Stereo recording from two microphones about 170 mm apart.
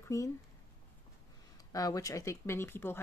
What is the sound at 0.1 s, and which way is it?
Speech, 15° left (ahead or behind).